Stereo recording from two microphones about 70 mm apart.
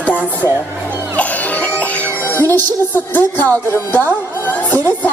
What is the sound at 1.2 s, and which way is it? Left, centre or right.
Music, left.